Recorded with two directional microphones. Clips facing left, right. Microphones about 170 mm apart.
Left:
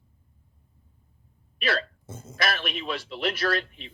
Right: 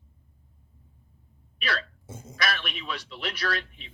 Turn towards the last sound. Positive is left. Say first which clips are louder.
# left 5 dB
turn(degrees=45)  # may be behind; listen again after turning